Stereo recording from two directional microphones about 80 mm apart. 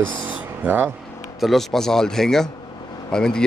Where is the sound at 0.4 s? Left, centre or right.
Right.